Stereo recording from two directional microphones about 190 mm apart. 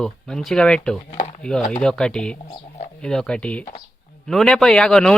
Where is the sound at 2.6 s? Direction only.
35° left (ahead or behind).